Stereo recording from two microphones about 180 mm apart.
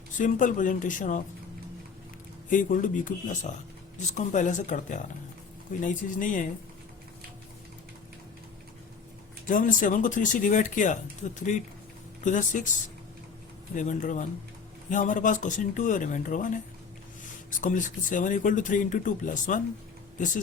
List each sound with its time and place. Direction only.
0.2 s speech: 45° left (ahead or behind)
2.5 s speech: 45° left (ahead or behind)
9.5 s speech: 45° left (ahead or behind)
13.7 s speech: 45° left (ahead or behind)
17.5 s speech: 45° left (ahead or behind)